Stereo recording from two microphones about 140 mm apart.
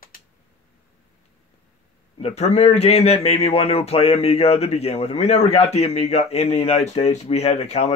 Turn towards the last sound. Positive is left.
turn(degrees=50)  # may be behind; listen again after turning